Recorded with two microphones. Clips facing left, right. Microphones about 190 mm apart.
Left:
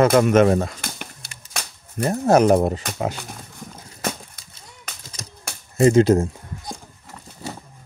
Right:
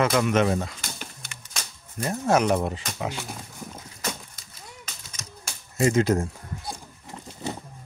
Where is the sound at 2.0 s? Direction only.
40° left (ahead or behind).